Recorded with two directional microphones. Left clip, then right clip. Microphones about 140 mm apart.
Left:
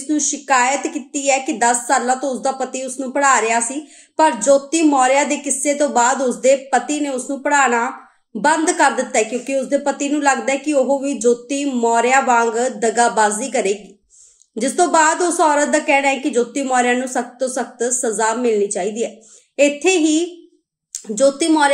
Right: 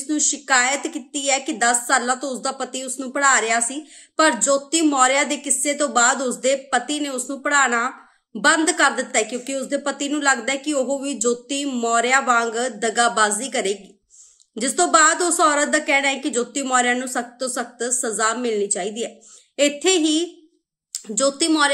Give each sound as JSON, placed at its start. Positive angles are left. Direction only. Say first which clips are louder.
{"t": 0.1, "sound": "a woman's voice", "louder": "left 3 dB", "side_deg": -40}
{"t": 8.4, "sound": "a woman's voice", "louder": "left 2 dB", "side_deg": -40}